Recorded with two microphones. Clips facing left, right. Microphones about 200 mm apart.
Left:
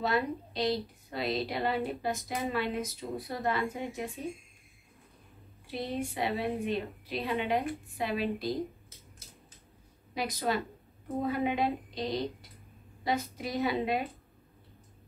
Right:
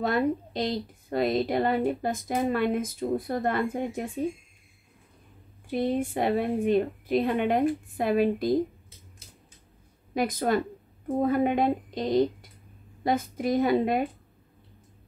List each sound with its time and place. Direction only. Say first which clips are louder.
0.0 s a woman's voice: right 5 dB; 50° right (ahead or behind)
5.7 s a woman's voice: right 8 dB; 50° right (ahead or behind)
10.1 s a woman's voice: right 7 dB; 50° right (ahead or behind)